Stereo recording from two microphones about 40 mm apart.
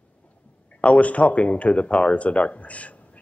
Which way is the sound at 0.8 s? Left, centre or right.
Left.